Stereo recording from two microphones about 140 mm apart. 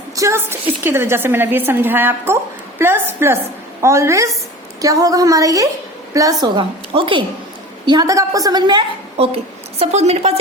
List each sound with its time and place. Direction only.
0.2 s a sound: 20° right (ahead or behind)
0.9 s a woman's voice: 15° right (ahead or behind)
6.4 s a woman's voice: 40° right (ahead or behind)
7.9 s a woman's voice: 25° right (ahead or behind)
9.1 s a woman's voice: 45° right (ahead or behind)